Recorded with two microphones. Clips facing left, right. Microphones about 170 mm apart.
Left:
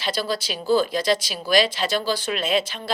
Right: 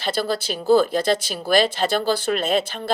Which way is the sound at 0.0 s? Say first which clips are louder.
Right 2 dB; 50° right (ahead or behind).